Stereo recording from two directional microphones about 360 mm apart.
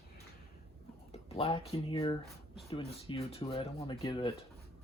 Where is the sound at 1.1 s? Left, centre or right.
Centre.